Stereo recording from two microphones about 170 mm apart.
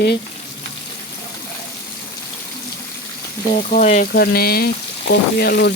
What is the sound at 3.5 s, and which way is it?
Frying, 45° left (ahead or behind).